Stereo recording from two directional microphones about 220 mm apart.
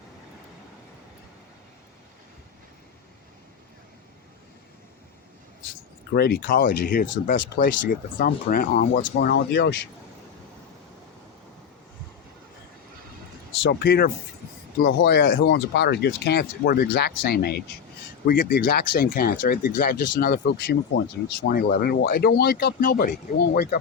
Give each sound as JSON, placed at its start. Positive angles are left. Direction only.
{"t": 6.1, "sound": "speech", "side_deg": 45}
{"t": 13.6, "sound": "speech", "side_deg": 50}